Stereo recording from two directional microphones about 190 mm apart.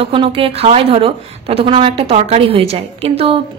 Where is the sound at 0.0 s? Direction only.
30° right (ahead or behind).